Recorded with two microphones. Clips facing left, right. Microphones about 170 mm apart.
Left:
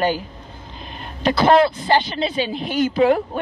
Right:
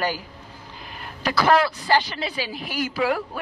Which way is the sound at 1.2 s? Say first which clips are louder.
Left 5 dB; 25° left (ahead or behind).